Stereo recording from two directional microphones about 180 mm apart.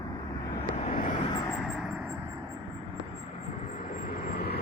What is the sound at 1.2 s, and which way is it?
Vehicle, 25° left (ahead or behind).